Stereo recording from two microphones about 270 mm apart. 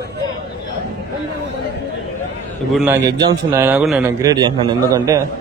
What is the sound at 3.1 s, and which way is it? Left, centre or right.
A man's voice, centre.